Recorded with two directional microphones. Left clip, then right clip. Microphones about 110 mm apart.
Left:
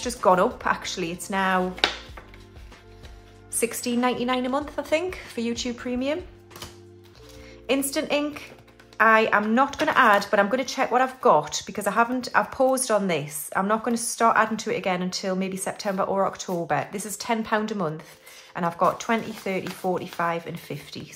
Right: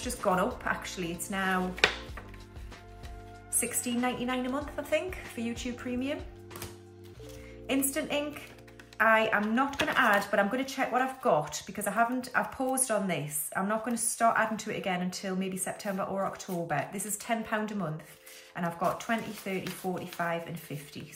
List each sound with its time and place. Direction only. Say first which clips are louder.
0.2 s a woman's voice: left 9 dB; 30° left (ahead or behind)
3.5 s a woman's voice: left 8 dB; 40° left (ahead or behind)
7.6 s a woman's voice: left 6 dB; 35° left (ahead or behind)
12.5 s a woman's voice: left 10 dB; 50° left (ahead or behind)
12.9 s a woman's voice: left 7 dB; 35° left (ahead or behind)